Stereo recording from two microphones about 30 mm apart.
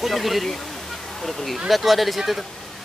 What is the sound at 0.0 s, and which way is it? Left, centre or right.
Speech, centre.